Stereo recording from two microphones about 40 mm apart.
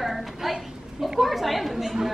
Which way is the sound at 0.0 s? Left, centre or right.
Centre.